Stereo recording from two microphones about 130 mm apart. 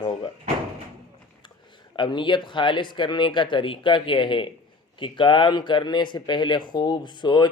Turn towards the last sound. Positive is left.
turn(degrees=35)  # may be behind; listen again after turning